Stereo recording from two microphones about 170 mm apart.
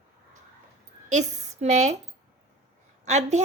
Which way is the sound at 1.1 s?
45° right (ahead or behind).